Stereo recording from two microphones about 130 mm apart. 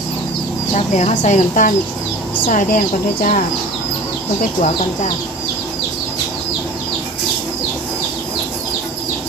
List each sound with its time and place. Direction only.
0.7 s speech: 60° left (ahead or behind)
2.5 s speech: 90° left